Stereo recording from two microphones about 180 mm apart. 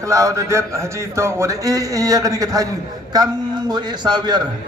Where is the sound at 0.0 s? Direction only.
15° right (ahead or behind).